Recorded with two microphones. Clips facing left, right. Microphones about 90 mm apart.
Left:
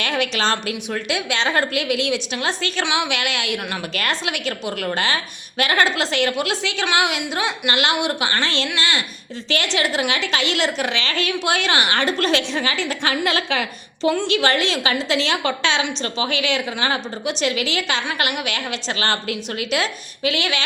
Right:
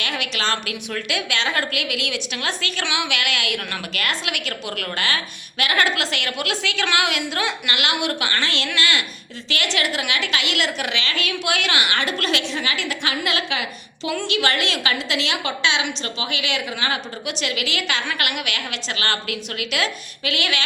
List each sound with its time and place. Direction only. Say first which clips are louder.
0.0 s a woman's voice: left 4 dB; 35° left (ahead or behind)